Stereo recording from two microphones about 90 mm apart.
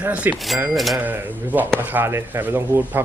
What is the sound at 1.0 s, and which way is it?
Speech, 20° right (ahead or behind).